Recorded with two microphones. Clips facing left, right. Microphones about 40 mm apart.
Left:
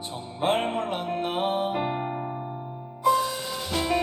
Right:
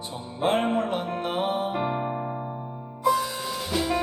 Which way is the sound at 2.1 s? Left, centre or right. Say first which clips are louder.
Right 1 dB; centre.